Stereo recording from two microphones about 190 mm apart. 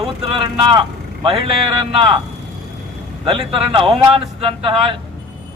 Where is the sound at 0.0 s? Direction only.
25° right (ahead or behind).